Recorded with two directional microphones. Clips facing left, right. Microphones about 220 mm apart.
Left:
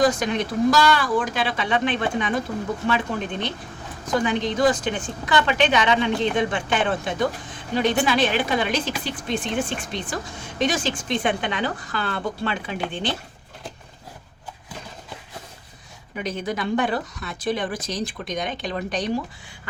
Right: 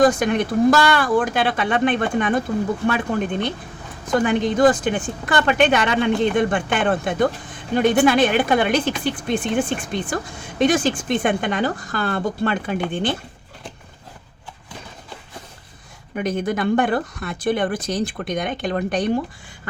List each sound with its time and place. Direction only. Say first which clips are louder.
0.0 s speech: right 4 dB; 50° right (ahead or behind)
16.1 s speech: right 5 dB; 50° right (ahead or behind)